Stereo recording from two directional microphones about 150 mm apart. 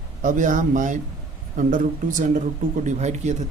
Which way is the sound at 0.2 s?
60° right (ahead or behind).